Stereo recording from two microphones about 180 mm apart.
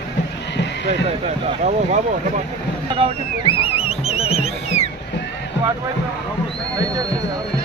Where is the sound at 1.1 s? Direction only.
40° right (ahead or behind).